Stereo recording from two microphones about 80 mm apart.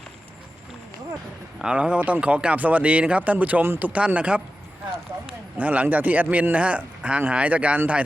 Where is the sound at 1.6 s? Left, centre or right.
Centre.